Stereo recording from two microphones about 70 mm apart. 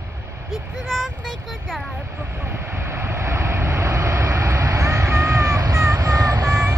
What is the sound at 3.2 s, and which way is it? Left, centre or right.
Vehicle, right.